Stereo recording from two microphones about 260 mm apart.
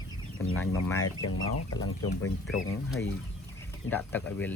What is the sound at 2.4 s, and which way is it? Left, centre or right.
Speech, centre.